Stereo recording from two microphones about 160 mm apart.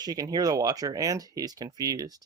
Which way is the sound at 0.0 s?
25° right (ahead or behind).